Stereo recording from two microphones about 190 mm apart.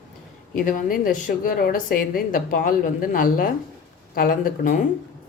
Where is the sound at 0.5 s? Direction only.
45° left (ahead or behind).